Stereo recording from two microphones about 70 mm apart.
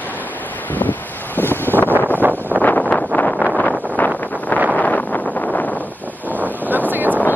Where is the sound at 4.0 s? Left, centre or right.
Left.